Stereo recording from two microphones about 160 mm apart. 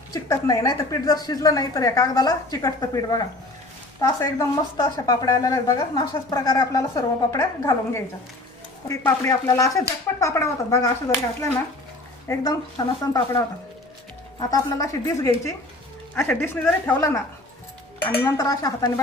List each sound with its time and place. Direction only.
0.1 s a woman's voice: 20° left (ahead or behind)
12.3 s a woman's voice: 20° left (ahead or behind)
14.5 s a woman's voice: 20° left (ahead or behind)
16.1 s a woman's voice: 10° left (ahead or behind)